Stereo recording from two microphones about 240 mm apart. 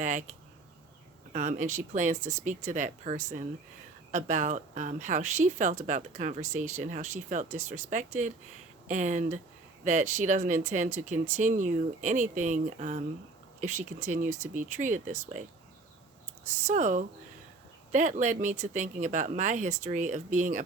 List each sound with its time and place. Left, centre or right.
0.0 s speech: right
1.3 s speech: right
16.6 s speech: right